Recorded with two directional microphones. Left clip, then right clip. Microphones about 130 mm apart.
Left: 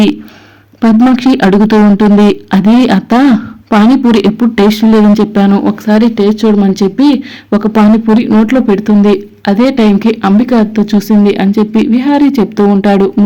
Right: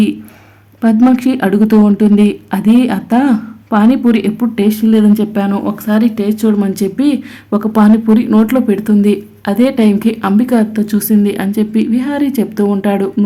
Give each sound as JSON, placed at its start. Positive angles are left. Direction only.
{"t": 0.8, "sound": "speech", "side_deg": 30}
{"t": 4.5, "sound": "speech", "side_deg": 45}
{"t": 5.3, "sound": "speech", "side_deg": 25}